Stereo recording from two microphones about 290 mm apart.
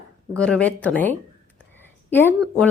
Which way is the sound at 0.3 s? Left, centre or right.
Centre.